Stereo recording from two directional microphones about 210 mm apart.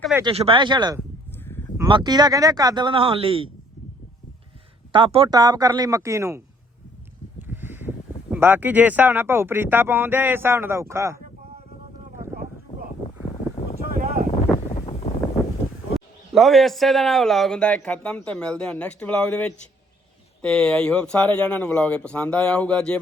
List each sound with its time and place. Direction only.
0.2 s speech: 25° right (ahead or behind)
4.9 s speech: 25° right (ahead or behind)
7.4 s speech: 10° right (ahead or behind)
12.7 s boat: 35° left (ahead or behind)
13.9 s wind noise: 40° right (ahead or behind)
14.7 s wind noise: 30° left (ahead or behind)
16.0 s speech: centre (ahead or behind)